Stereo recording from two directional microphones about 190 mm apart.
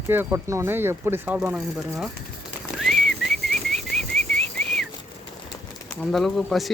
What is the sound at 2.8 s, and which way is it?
Whistling, centre (ahead or behind).